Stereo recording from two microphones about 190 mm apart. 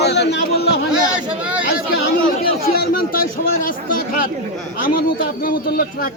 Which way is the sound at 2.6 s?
55° left (ahead or behind).